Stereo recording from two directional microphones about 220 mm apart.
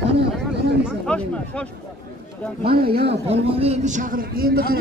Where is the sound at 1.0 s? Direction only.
5° left (ahead or behind).